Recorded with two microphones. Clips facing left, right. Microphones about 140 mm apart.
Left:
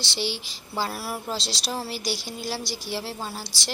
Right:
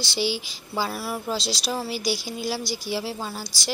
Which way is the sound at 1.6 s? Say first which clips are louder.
Right 3 dB; centre (ahead or behind).